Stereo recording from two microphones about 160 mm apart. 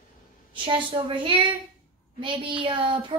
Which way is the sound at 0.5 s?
30° right (ahead or behind).